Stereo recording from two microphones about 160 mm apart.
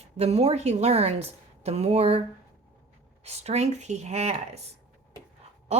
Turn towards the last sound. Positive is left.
turn(degrees=-45)  # may be behind; listen again after turning